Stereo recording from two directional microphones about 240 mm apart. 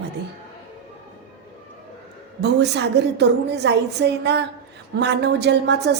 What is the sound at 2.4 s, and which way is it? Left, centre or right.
A woman's voice, right.